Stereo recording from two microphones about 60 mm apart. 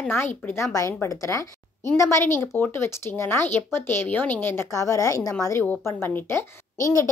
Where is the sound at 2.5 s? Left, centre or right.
Left.